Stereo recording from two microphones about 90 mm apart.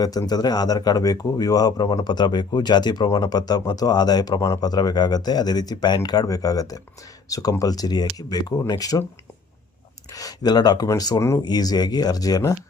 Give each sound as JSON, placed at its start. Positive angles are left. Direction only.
{"t": 0.0, "sound": "speech", "side_deg": 45}
{"t": 10.1, "sound": "speech", "side_deg": 40}